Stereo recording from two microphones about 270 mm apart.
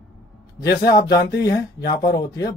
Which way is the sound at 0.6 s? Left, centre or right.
Left.